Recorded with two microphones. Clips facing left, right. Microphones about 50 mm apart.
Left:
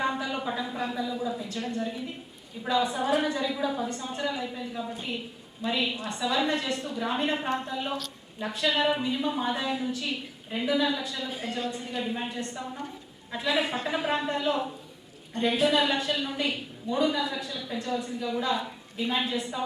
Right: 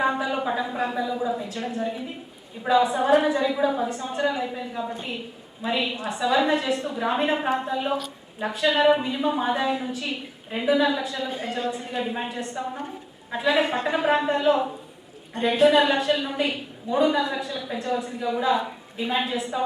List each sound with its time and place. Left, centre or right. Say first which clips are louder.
0.0 s a sound: right 5 dB; centre
0.8 s speech: right 5 dB; centre
1.5 s a woman's voice: right 3 dB; centre
3.8 s a woman's voice: right 6 dB; centre